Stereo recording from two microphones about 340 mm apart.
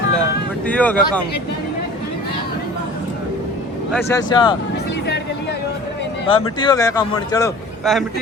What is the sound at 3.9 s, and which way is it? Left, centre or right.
Speech, centre.